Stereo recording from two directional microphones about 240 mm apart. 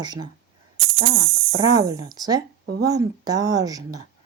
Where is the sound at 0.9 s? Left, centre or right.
Right.